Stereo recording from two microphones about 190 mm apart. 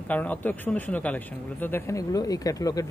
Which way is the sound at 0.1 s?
10° left (ahead or behind).